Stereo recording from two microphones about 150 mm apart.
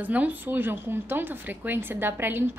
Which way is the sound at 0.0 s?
10° right (ahead or behind).